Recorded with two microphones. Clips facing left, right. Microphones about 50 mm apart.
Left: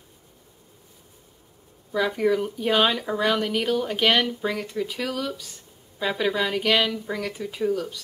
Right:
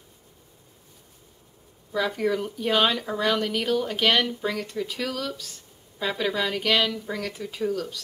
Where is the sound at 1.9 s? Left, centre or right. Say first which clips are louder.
Left 3 dB; centre.